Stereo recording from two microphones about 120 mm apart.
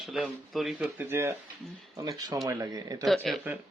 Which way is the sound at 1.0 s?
20° right (ahead or behind).